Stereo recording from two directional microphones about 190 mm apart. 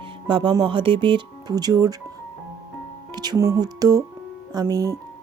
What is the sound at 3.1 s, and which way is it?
Speech, 20° right (ahead or behind).